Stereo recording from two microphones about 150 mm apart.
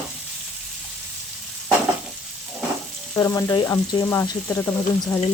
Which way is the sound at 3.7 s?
20° left (ahead or behind).